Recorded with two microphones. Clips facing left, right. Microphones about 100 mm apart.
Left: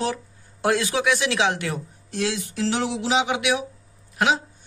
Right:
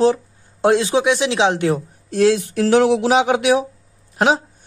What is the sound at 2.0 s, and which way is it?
Speech, 45° right (ahead or behind).